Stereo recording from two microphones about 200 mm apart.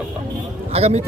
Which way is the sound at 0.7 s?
30° right (ahead or behind).